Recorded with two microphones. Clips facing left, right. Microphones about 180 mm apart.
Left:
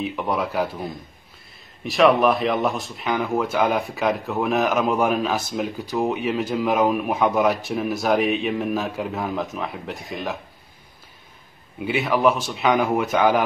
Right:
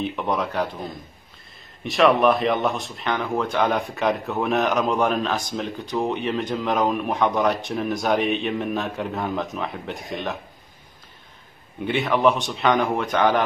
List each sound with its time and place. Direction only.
0.0 s speech: centre (ahead or behind)
11.8 s speech: centre (ahead or behind)